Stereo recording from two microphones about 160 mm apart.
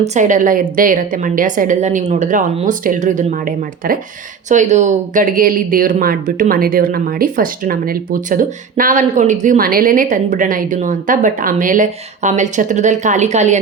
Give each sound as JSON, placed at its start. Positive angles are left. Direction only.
{"t": 0.0, "sound": "a woman's voice", "side_deg": -50}